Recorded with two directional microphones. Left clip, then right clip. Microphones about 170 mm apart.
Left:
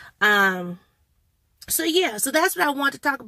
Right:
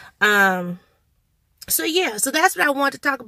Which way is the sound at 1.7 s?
15° right (ahead or behind).